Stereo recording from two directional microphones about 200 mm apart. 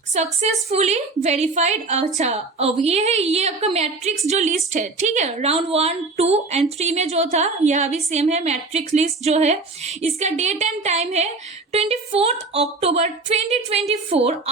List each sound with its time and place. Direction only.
0.1 s a woman's voice: 35° right (ahead or behind)